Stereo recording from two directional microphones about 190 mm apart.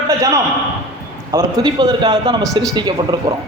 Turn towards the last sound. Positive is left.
turn(degrees=-25)  # may be behind; listen again after turning